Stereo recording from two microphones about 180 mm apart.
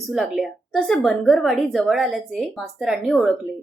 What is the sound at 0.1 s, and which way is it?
A woman's voice, centre (ahead or behind).